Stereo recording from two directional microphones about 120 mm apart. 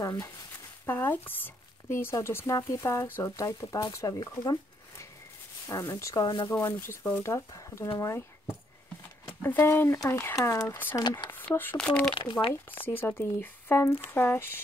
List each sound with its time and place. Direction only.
0.0 s speech: 25° left (ahead or behind)
6.5 s speech: 20° left (ahead or behind)
9.4 s speech: 20° left (ahead or behind)
11.0 s speech: 40° left (ahead or behind)
11.2 s speech: 15° left (ahead or behind)
12.1 s speech: 45° left (ahead or behind)
12.7 s speech: 15° left (ahead or behind)